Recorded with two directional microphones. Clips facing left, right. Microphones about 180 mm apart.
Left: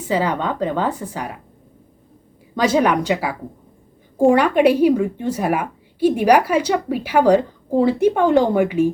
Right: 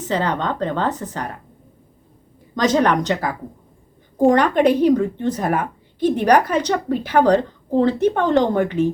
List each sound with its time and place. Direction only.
0.0 s speech: 10° left (ahead or behind)
2.6 s speech: 10° left (ahead or behind)